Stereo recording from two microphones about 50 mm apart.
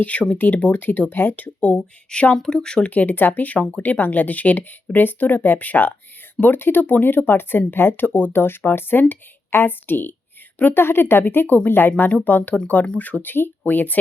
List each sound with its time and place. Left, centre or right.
0.0 s speech: left
1.6 s speech: left
2.9 s speech: left